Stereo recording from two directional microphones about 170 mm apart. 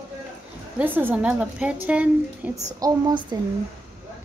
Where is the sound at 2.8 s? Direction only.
25° right (ahead or behind).